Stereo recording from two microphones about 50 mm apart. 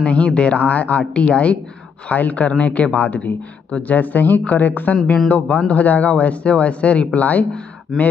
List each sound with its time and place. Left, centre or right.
0.0 s speech: left
5.3 s speech: left